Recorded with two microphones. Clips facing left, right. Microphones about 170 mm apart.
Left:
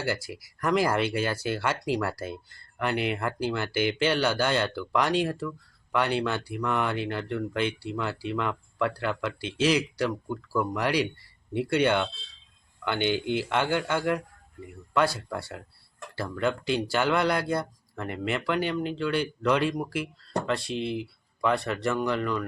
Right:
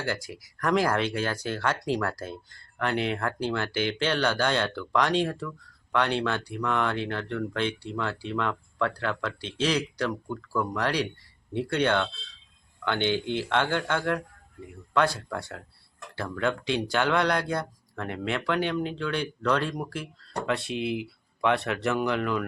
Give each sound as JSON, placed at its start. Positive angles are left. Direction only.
{"t": 0.0, "sound": "speech", "side_deg": 5}
{"t": 20.5, "sound": "speech", "side_deg": 0}